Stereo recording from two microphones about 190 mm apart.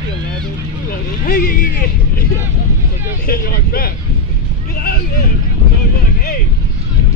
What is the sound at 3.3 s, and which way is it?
Vehicle, 50° left (ahead or behind).